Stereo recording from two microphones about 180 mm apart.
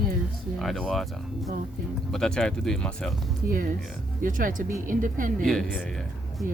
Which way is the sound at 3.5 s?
50° right (ahead or behind).